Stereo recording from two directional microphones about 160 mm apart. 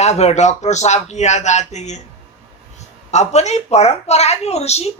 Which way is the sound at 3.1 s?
45° left (ahead or behind).